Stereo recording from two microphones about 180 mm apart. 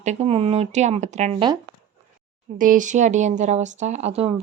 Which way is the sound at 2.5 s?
45° right (ahead or behind).